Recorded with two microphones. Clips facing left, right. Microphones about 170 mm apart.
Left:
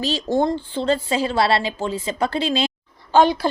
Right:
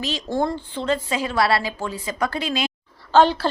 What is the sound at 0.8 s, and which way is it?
A woman's voice, 30° left (ahead or behind).